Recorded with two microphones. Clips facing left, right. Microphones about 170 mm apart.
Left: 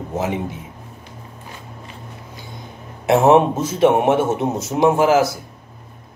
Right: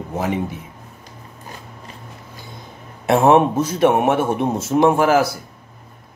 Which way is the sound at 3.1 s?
20° left (ahead or behind).